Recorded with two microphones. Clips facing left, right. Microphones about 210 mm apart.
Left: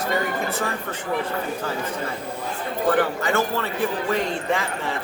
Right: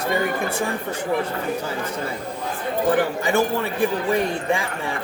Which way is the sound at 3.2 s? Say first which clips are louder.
Right 3 dB; 15° right (ahead or behind).